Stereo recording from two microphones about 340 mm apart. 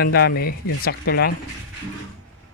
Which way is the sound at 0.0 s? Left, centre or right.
Left.